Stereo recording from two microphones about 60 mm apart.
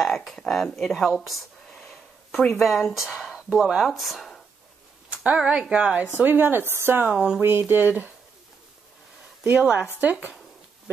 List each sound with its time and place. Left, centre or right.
0.0 s speech: centre
0.7 s a sound: centre
2.5 s speech: centre
5.1 s a woman's voice: centre
6.1 s speech: right
9.4 s a woman's voice: right